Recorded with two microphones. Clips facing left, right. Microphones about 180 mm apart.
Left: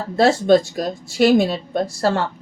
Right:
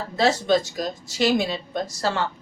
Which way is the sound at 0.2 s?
55° left (ahead or behind).